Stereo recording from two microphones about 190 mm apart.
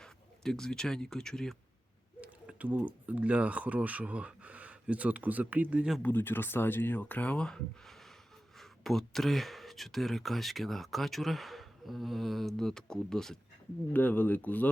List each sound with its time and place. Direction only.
0.0 s speech: 5° left (ahead or behind)
2.2 s speech: 10° right (ahead or behind)
6.0 s speech: 10° left (ahead or behind)